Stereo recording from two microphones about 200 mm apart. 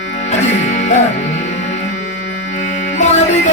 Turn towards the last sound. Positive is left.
turn(degrees=35)  # may be behind; listen again after turning